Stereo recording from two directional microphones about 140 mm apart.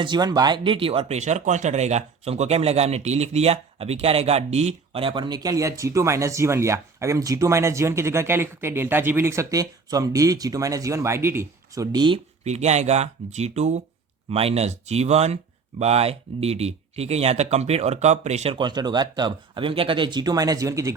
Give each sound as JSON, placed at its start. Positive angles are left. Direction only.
{"t": 0.0, "sound": "speech", "side_deg": -30}
{"t": 12.5, "sound": "speech", "side_deg": -50}
{"t": 18.5, "sound": "speech", "side_deg": -30}